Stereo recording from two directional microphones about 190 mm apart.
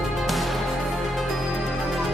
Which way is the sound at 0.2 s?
Centre (ahead or behind).